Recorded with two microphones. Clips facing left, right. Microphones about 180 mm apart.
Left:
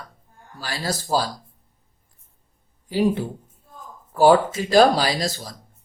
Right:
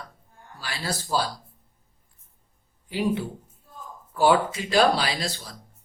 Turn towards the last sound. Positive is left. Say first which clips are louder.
# left 5 dB
turn(degrees=40)  # may be behind; listen again after turning